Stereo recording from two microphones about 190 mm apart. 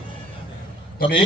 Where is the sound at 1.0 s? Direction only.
25° left (ahead or behind).